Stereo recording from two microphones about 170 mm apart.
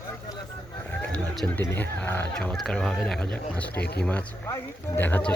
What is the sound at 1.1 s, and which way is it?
Speech, 5° left (ahead or behind).